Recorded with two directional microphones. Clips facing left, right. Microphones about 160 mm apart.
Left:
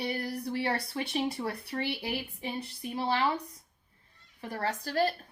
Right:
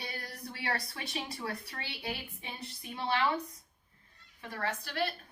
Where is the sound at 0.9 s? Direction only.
30° left (ahead or behind).